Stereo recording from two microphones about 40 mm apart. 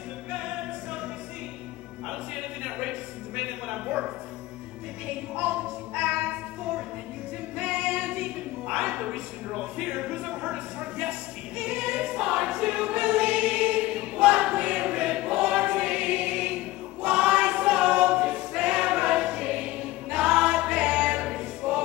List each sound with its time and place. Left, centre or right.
2.0 s a sound: centre
3.7 s a sound: right
5.4 s music: right
7.5 s choir: right
8.8 s a sound: right
9.5 s music: centre
11.6 s choir: centre
17.9 s a capella: right
18.2 s choir: centre